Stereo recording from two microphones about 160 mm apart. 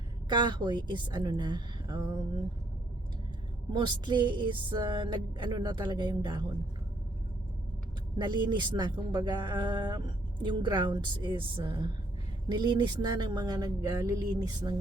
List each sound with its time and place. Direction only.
0.3 s music: 30° right (ahead or behind)
3.7 s music: 30° right (ahead or behind)
8.2 s music: 30° right (ahead or behind)